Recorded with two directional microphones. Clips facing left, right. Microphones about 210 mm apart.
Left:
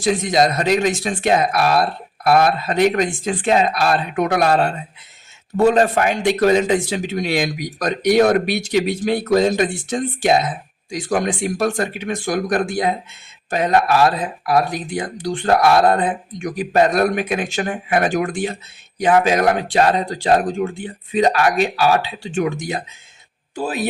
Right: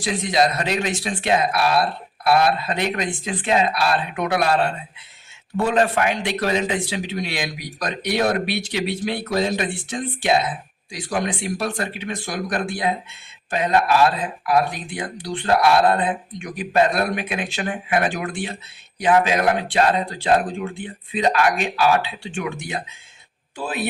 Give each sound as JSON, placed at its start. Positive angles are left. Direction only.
{"t": 0.0, "sound": "speech", "side_deg": 45}